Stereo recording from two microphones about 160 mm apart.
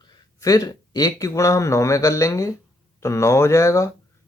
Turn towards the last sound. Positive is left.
turn(degrees=20)  # may be behind; listen again after turning